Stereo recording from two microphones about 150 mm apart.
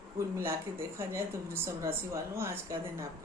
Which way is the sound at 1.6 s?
20° right (ahead or behind).